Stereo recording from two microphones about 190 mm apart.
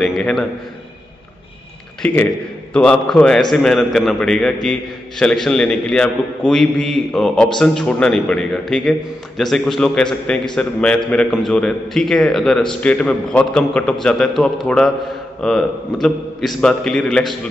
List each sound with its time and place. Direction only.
0.0 s a man's voice: centre (ahead or behind)
2.0 s a man's voice: 10° left (ahead or behind)